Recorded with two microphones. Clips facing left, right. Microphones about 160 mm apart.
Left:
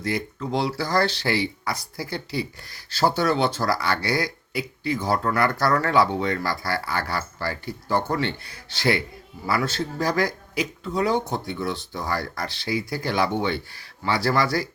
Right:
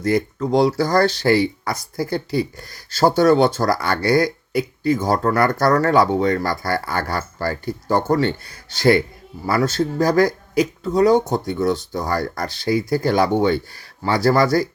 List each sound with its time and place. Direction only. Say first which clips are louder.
0.0 s speech: right 8 dB; 45° right (ahead or behind)